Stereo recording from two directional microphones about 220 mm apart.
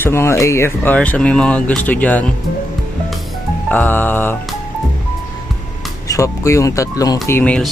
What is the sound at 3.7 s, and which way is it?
Speech, 5° left (ahead or behind).